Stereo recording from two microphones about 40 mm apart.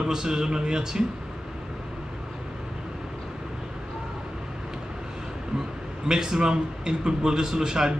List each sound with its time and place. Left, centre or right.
0.0 s a man's voice: centre
6.0 s a man's voice: centre